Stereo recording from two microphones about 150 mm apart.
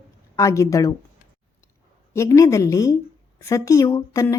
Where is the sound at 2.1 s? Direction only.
20° left (ahead or behind).